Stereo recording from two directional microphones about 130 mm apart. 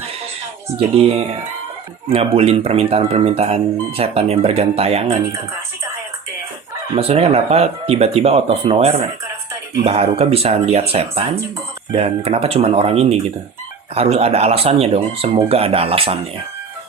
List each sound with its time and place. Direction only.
2.0 s speech: 50° right (ahead or behind)
6.9 s speech: 50° right (ahead or behind)